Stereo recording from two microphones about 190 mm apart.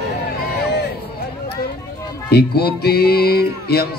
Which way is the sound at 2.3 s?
55° left (ahead or behind).